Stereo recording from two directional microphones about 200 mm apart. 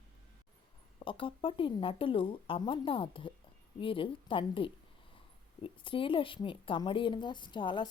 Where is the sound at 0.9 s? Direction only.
25° left (ahead or behind).